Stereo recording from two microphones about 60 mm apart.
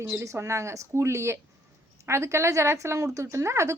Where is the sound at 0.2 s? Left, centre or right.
Right.